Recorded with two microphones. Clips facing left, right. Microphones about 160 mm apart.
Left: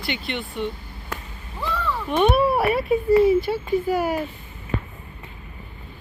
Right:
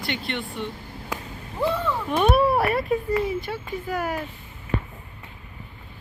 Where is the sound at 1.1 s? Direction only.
15° right (ahead or behind).